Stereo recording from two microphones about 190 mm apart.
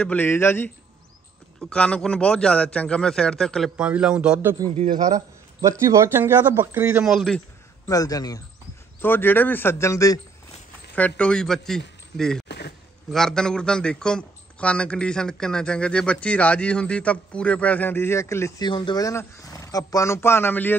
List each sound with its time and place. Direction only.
0.0 s a man's voice: 10° left (ahead or behind); by 4.6 s 10° right (ahead or behind)
4.7 s a man's voice: 25° right (ahead or behind); by 7.4 s centre (ahead or behind)
7.8 s speech: 20° left (ahead or behind)
11.0 s a man's voice: 5° left (ahead or behind)
12.4 s a sound: 60° left (ahead or behind)
13.1 s a man's voice: 5° left (ahead or behind)